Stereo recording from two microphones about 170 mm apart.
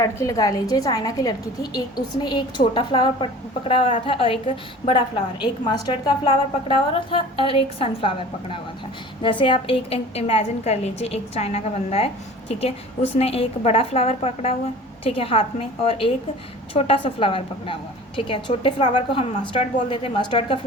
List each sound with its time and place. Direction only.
0.0 s a woman's voice: 20° left (ahead or behind); by 12.1 s 35° left (ahead or behind)
13.1 s a woman's voice: 35° left (ahead or behind)